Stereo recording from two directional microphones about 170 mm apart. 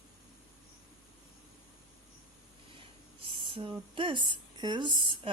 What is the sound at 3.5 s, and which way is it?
Speech, 30° right (ahead or behind).